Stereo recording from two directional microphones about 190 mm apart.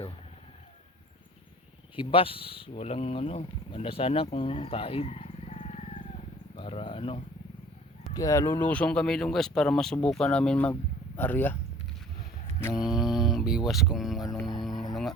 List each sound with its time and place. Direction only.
2.0 s speech: 25° left (ahead or behind)
8.1 s speech: 15° left (ahead or behind)
12.7 s speech: centre (ahead or behind)
14.6 s music: centre (ahead or behind)